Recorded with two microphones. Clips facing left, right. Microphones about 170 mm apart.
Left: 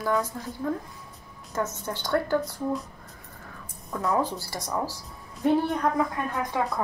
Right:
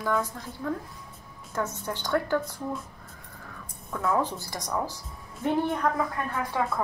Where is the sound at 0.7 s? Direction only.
10° left (ahead or behind).